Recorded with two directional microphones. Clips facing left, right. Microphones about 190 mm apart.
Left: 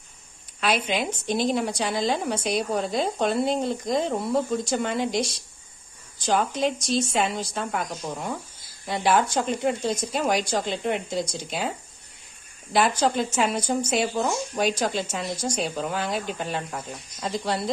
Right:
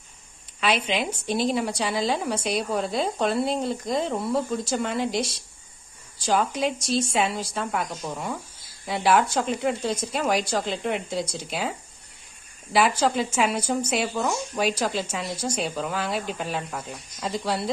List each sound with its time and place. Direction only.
0.6 s a woman's voice: centre (ahead or behind)
12.7 s a woman's voice: 5° right (ahead or behind)